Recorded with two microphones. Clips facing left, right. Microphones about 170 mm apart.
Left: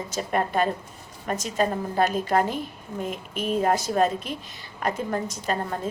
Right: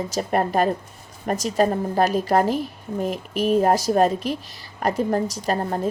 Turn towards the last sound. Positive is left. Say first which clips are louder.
# right 4 dB
turn(degrees=-35)  # may be behind; listen again after turning